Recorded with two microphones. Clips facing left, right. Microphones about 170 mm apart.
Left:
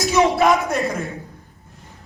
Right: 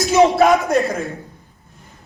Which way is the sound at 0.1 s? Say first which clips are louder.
Right 4 dB; 40° right (ahead or behind).